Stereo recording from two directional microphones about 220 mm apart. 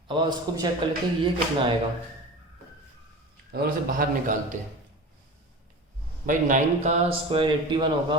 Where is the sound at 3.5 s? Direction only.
40° right (ahead or behind).